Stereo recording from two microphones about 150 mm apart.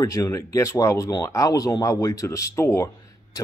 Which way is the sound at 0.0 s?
20° left (ahead or behind).